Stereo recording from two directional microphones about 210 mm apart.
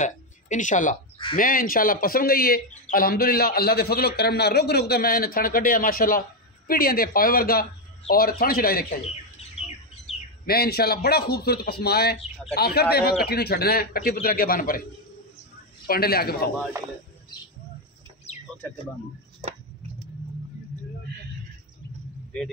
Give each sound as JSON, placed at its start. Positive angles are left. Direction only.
{"t": 0.0, "sound": "speech", "side_deg": 35}
{"t": 10.4, "sound": "speech", "side_deg": 45}
{"t": 15.9, "sound": "speech", "side_deg": 45}